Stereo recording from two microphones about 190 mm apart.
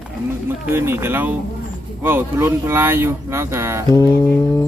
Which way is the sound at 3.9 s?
15° left (ahead or behind).